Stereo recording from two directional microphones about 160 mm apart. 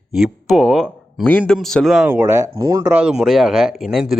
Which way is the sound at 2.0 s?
15° right (ahead or behind).